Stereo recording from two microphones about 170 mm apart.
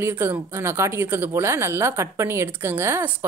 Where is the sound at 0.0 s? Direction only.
10° right (ahead or behind).